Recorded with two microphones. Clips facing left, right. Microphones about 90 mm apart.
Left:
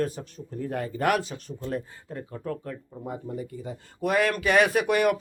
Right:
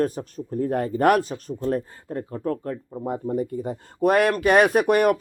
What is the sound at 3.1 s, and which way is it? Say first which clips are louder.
Speech: right 8 dB; 50° right (ahead or behind).